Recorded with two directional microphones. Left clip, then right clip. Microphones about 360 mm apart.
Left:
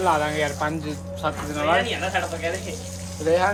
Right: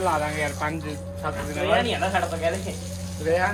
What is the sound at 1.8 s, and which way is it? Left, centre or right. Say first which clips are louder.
Speech: right 1 dB; centre.